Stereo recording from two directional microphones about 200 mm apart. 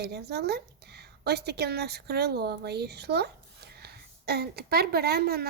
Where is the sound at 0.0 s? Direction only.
55° right (ahead or behind).